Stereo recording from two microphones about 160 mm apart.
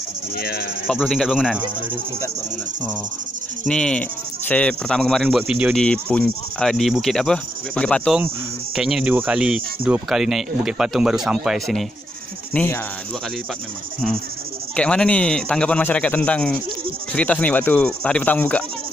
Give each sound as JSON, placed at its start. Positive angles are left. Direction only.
{"t": 0.4, "sound": "speech", "side_deg": 75}
{"t": 0.8, "sound": "speech", "side_deg": 0}
{"t": 3.6, "sound": "speech", "side_deg": 5}
{"t": 12.5, "sound": "speech", "side_deg": 15}
{"t": 14.8, "sound": "speech", "side_deg": 5}